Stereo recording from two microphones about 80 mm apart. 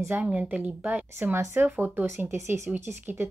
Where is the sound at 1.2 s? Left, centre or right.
Right.